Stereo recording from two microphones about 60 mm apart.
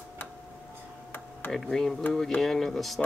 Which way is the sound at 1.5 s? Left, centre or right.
Centre.